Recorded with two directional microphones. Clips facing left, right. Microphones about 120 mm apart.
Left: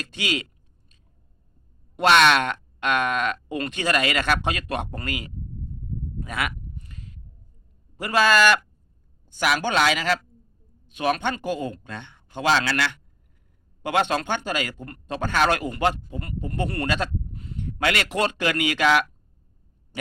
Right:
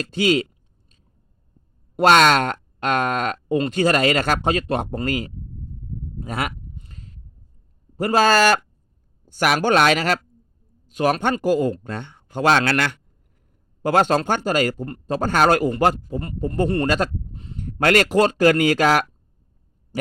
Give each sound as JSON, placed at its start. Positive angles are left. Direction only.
{"t": 0.1, "sound": "speech", "side_deg": -35}
{"t": 2.0, "sound": "speech", "side_deg": -40}
{"t": 6.7, "sound": "a sound", "side_deg": -30}
{"t": 7.9, "sound": "speech", "side_deg": -35}
{"t": 9.3, "sound": "speech", "side_deg": -50}
{"t": 10.8, "sound": "speech", "side_deg": -40}
{"t": 13.8, "sound": "speech", "side_deg": -40}
{"t": 16.8, "sound": "speech", "side_deg": -40}
{"t": 17.3, "sound": "a sound", "side_deg": -25}
{"t": 17.6, "sound": "speech", "side_deg": -45}